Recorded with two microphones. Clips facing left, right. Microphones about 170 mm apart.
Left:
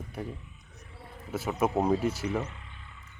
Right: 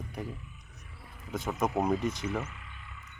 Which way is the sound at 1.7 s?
30° left (ahead or behind).